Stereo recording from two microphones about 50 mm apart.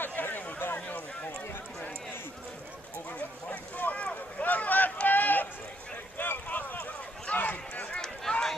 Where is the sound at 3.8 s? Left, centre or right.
Left.